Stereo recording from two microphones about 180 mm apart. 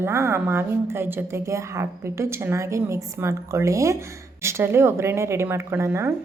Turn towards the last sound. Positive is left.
turn(degrees=-15)  # may be behind; listen again after turning